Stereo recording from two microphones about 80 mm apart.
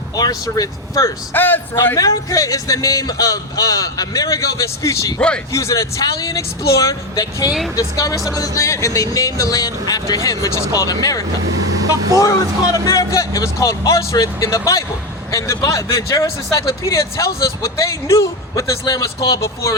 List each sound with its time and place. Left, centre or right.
0.2 s a man's voice: left
1.3 s a man's voice: left
2.0 s a man's voice: left
12.2 s a man's voice: left